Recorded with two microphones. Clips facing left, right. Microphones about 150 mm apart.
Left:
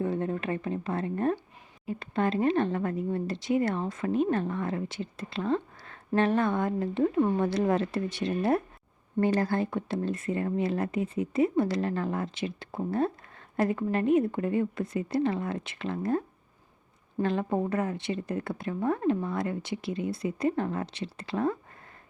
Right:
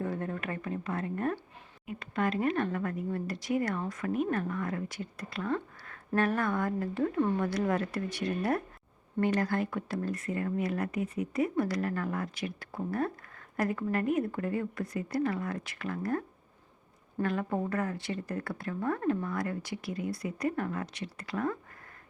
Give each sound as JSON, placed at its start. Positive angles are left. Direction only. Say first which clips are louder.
{"t": 0.0, "sound": "speech", "louder": "left 5 dB", "side_deg": 25}